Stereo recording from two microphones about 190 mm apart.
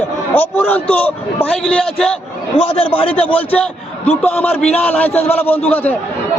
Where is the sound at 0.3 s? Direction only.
10° left (ahead or behind).